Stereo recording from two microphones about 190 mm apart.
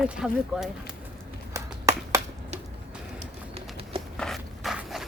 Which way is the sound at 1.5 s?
15° right (ahead or behind).